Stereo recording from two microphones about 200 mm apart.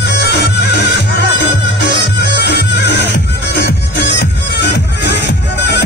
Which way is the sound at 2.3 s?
60° left (ahead or behind).